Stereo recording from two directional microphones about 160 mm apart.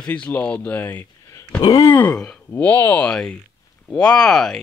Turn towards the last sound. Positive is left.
turn(degrees=5)  # may be behind; listen again after turning